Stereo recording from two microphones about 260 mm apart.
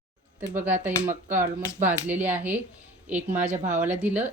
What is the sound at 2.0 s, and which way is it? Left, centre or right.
A woman's voice, centre.